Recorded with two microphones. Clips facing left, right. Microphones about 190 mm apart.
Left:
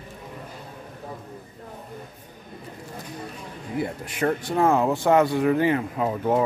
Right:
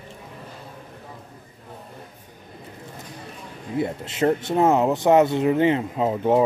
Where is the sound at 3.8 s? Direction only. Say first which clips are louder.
Right 3 dB; 25° right (ahead or behind).